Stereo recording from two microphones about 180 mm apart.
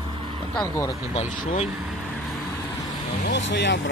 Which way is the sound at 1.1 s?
35° left (ahead or behind).